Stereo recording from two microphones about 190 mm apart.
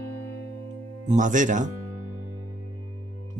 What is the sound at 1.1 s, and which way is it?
Speech, 40° right (ahead or behind).